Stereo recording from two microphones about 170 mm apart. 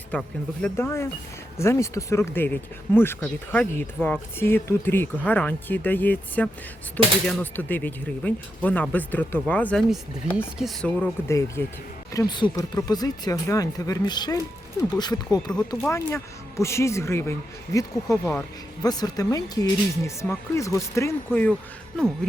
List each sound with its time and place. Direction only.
0.1 s speech: 10° left (ahead or behind)
10.3 s speech: centre (ahead or behind)